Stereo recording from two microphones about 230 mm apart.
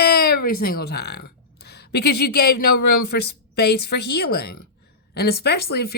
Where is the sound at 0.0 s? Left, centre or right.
Left.